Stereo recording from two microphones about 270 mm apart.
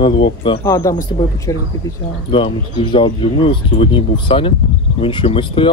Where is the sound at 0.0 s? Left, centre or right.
Centre.